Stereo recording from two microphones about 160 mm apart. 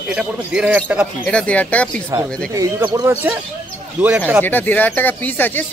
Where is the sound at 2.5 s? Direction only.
20° right (ahead or behind).